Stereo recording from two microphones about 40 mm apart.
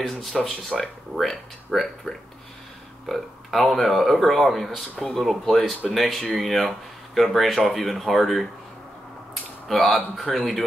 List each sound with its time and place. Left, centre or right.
0.2 s speech: centre
9.3 s a sound: centre
10.2 s speech: left